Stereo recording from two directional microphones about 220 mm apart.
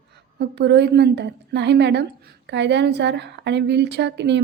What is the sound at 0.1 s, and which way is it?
A woman's voice, 50° right (ahead or behind).